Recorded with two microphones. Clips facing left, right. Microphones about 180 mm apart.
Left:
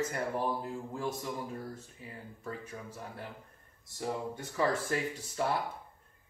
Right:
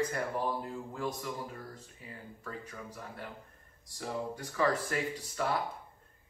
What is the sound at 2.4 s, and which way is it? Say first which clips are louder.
Speech: left 2 dB; 25° left (ahead or behind).